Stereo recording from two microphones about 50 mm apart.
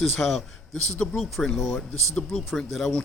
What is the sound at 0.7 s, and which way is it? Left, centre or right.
Speech, left.